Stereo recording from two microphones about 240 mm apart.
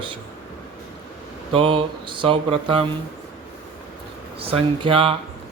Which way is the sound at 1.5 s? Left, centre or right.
Right.